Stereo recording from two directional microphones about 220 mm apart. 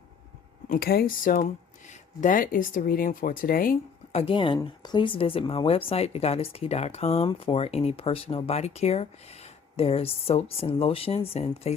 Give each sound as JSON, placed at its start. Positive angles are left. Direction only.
{"t": 0.7, "sound": "speech", "side_deg": 45}
{"t": 4.2, "sound": "speech", "side_deg": 25}